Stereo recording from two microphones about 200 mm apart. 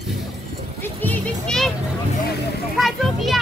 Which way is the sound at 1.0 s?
5° left (ahead or behind).